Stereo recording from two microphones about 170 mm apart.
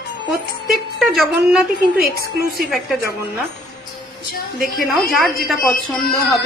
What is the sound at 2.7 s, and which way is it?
Speech, centre (ahead or behind).